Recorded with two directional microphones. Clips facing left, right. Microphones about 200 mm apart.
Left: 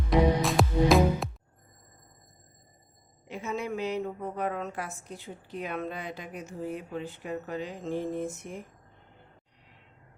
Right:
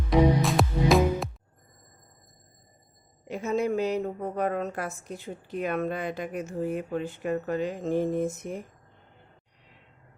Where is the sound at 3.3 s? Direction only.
40° right (ahead or behind).